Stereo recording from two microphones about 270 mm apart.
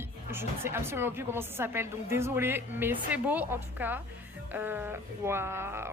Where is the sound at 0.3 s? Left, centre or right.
Centre.